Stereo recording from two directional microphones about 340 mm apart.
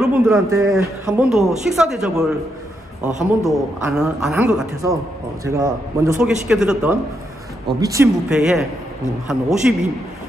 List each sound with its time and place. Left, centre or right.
0.0 s a woman's voice: centre